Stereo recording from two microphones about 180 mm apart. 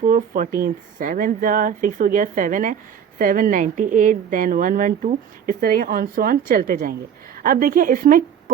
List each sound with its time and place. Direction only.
0.0 s a woman's voice: 50° right (ahead or behind)